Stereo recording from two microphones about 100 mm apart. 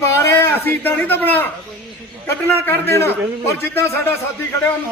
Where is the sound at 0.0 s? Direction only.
30° left (ahead or behind).